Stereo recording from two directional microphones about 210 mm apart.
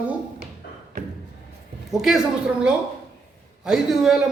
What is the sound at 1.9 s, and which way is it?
Speech, centre (ahead or behind).